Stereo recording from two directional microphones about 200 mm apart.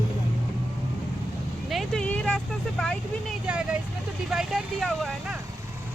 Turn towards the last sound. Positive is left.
turn(degrees=0)  # may be behind; listen again after turning